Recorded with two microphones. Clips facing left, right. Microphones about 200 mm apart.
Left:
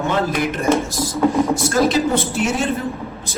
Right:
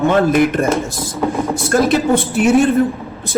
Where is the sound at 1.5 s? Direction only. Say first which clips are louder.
Right 2 dB; 55° right (ahead or behind).